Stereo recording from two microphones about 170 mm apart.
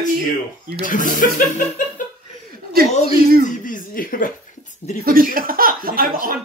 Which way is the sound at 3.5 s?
50° left (ahead or behind).